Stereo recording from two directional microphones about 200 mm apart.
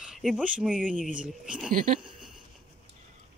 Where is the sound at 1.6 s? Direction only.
40° right (ahead or behind).